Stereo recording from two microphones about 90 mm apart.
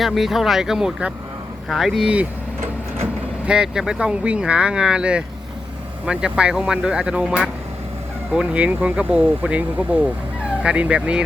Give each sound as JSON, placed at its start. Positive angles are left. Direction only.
{"t": 0.0, "sound": "speech", "side_deg": 0}
{"t": 3.4, "sound": "speech", "side_deg": -10}